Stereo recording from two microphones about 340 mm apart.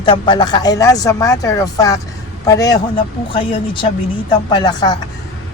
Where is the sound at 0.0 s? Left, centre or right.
Centre.